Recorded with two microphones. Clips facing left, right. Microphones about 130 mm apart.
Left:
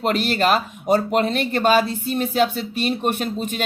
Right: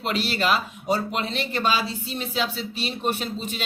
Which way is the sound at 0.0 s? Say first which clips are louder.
Left 5 dB; 50° left (ahead or behind).